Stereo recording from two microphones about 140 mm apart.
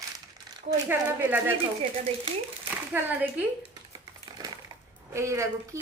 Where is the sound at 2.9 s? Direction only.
10° right (ahead or behind).